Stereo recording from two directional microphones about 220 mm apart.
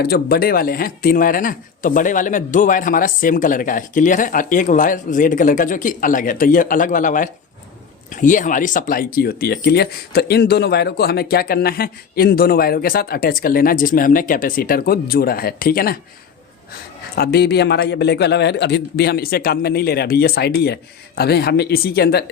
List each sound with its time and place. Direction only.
0.0 s speech: 45° left (ahead or behind)
17.2 s speech: 45° left (ahead or behind)